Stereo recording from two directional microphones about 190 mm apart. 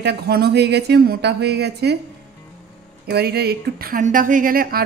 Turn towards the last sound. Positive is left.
turn(degrees=-50)  # may be behind; listen again after turning